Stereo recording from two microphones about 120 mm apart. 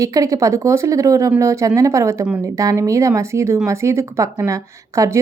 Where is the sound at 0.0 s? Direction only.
25° right (ahead or behind).